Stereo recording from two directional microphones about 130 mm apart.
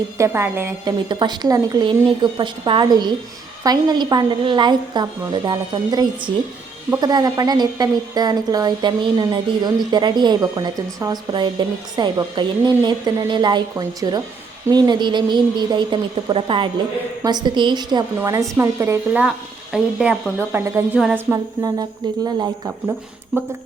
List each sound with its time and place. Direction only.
0.2 s speech: 20° right (ahead or behind)
0.9 s speech: 35° right (ahead or behind)
18.2 s speech: 25° right (ahead or behind)
19.7 s speech: 5° right (ahead or behind)
20.7 s speech: 20° right (ahead or behind)
21.0 s a sound: 5° right (ahead or behind)
21.3 s speech: 30° right (ahead or behind)